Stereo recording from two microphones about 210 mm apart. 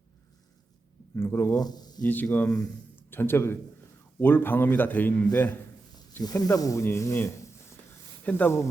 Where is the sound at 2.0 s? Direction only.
10° left (ahead or behind).